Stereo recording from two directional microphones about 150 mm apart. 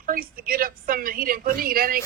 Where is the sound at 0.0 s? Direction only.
70° right (ahead or behind).